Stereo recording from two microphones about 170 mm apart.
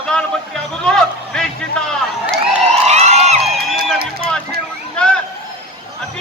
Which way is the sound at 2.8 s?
40° right (ahead or behind).